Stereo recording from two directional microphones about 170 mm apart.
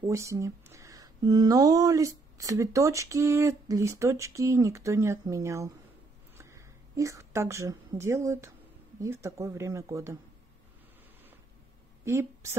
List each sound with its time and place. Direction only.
0.0 s a woman's voice: 15° right (ahead or behind)
12.0 s a woman's voice: 15° right (ahead or behind)